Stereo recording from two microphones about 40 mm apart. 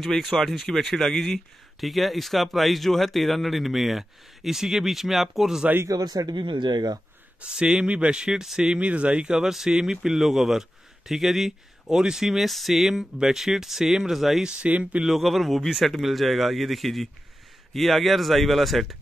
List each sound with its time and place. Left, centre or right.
0.0 s speech: centre
7.4 s speech: right
8.8 s speech: right
9.4 s speech: centre
14.4 s speech: right
15.0 s speech: centre